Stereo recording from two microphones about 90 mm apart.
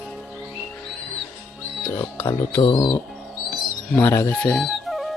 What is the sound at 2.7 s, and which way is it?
Speech, 65° left (ahead or behind).